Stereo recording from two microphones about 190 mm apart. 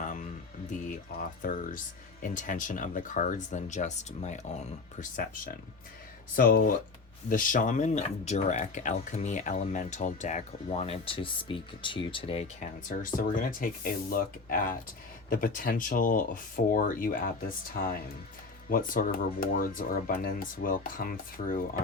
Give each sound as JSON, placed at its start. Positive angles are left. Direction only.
{"t": 0.0, "sound": "music", "side_deg": 40}
{"t": 1.4, "sound": "speech", "side_deg": 45}